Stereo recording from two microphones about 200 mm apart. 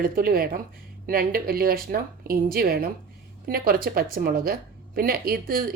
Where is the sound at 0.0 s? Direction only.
50° right (ahead or behind).